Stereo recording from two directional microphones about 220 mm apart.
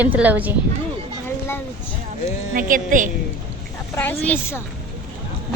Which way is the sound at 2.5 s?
35° right (ahead or behind).